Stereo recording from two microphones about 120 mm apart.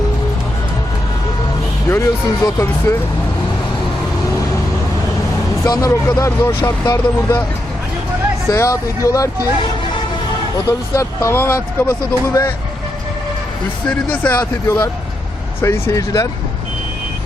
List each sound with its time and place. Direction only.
1.9 s speech: 25° left (ahead or behind)
5.6 s a man's voice: 30° left (ahead or behind)
8.4 s speech: 25° left (ahead or behind)
10.7 s speech: 25° left (ahead or behind)
13.8 s speech: 15° left (ahead or behind)
15.6 s speech: 25° left (ahead or behind)